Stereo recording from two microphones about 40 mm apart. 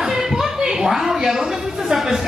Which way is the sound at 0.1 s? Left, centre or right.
Centre.